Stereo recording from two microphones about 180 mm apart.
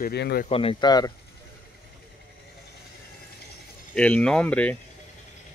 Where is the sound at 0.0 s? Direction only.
60° left (ahead or behind).